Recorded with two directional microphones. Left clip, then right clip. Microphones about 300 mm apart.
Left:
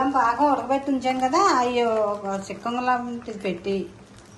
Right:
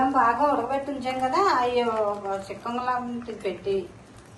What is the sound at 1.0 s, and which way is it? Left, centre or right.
A woman's voice, left.